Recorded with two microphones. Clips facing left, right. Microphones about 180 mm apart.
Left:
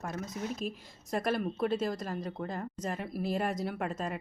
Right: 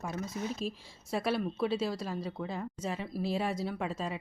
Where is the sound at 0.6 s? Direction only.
35° right (ahead or behind).